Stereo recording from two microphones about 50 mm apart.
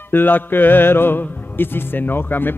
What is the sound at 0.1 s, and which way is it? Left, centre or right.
Music, left.